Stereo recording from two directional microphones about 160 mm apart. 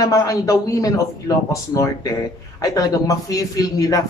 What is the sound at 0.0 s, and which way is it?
A man's voice, 20° left (ahead or behind).